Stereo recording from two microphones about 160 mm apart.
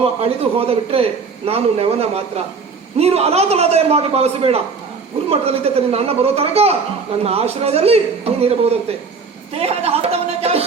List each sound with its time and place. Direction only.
0.0 s a man's voice: 35° right (ahead or behind)